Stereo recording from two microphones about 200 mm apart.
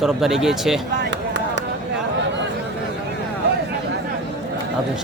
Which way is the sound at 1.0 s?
60° right (ahead or behind).